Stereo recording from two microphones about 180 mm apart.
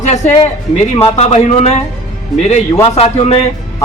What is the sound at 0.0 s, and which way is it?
A man's voice, 40° left (ahead or behind).